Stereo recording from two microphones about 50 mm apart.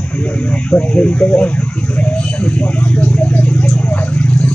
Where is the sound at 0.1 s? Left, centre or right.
Left.